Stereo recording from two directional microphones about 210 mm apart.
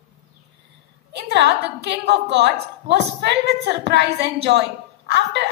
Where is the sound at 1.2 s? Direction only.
50° right (ahead or behind).